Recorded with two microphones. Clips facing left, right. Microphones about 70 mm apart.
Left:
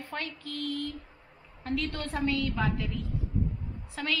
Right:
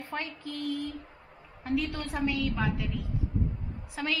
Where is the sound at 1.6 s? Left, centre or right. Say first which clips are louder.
Right 2 dB; centre.